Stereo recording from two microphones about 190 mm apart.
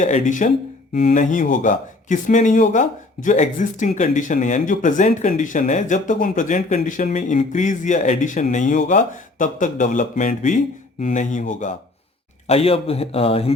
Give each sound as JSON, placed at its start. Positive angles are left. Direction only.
{"t": 0.0, "sound": "speech", "side_deg": 40}